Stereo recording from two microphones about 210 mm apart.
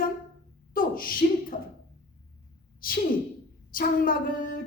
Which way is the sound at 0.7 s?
40° left (ahead or behind).